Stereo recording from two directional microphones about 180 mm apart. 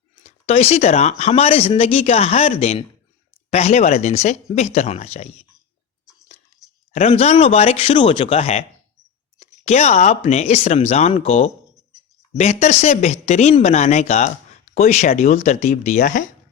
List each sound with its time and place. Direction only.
0.2 s speech: 35° left (ahead or behind)
6.9 s speech: 35° left (ahead or behind)